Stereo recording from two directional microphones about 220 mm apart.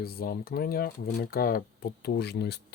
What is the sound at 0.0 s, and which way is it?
Speech, 45° left (ahead or behind).